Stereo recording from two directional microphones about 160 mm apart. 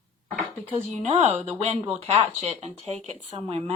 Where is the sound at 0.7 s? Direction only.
35° right (ahead or behind).